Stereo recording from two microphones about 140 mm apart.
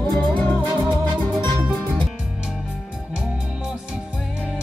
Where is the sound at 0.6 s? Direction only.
30° right (ahead or behind).